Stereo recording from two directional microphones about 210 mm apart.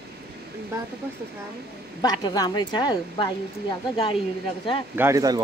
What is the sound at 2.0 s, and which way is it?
Speech, 20° left (ahead or behind).